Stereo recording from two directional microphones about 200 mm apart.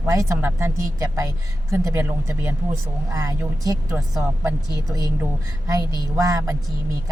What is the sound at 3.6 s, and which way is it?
A man's voice, 15° right (ahead or behind).